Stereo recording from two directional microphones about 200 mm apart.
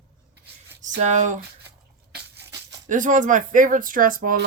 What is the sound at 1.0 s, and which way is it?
Speech, 35° right (ahead or behind).